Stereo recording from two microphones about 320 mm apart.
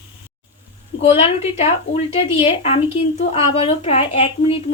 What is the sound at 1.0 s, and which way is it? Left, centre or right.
Speech, centre.